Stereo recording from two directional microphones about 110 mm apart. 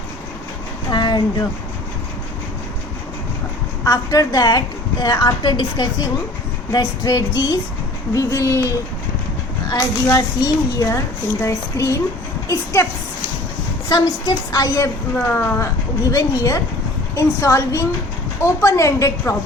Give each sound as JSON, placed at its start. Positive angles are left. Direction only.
{"t": 0.9, "sound": "a sound", "side_deg": 40}
{"t": 3.8, "sound": "a woman's voice", "side_deg": 35}
{"t": 9.7, "sound": "a woman's voice", "side_deg": 30}
{"t": 13.9, "sound": "a woman's voice", "side_deg": 35}